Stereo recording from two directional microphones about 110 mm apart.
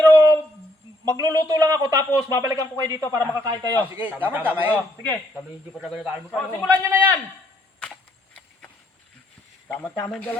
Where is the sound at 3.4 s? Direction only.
35° right (ahead or behind).